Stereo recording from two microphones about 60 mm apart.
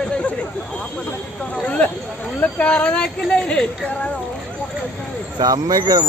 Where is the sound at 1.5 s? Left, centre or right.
Left.